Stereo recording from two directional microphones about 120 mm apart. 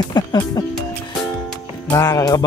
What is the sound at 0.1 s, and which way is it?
Speech, 35° left (ahead or behind).